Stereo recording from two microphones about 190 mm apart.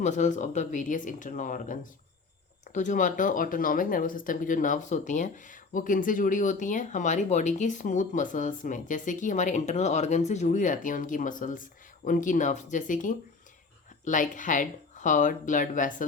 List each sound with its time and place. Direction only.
0.0 s speech: 40° left (ahead or behind)